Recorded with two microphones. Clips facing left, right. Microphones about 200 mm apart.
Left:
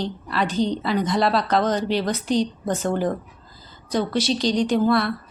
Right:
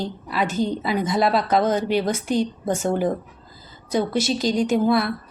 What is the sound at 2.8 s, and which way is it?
Speech, 10° right (ahead or behind).